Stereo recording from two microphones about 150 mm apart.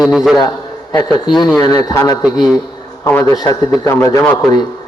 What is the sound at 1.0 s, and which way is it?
A man's voice, 30° left (ahead or behind).